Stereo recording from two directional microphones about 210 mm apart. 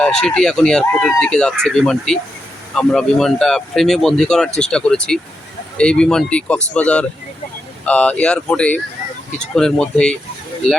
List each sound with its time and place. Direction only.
0.0 s speech: 5° left (ahead or behind)